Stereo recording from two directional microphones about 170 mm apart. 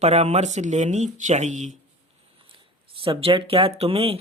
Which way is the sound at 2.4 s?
30° right (ahead or behind).